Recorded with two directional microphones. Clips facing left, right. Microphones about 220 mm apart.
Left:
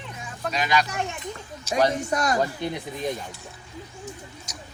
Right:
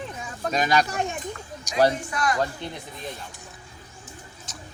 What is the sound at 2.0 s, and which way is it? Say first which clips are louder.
Speech: left 3 dB; 45° left (ahead or behind).